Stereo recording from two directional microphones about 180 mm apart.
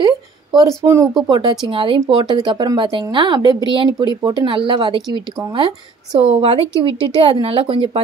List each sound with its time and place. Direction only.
0.6 s a woman's voice: 15° right (ahead or behind)